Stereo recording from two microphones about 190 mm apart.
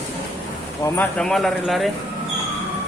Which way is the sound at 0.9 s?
5° left (ahead or behind).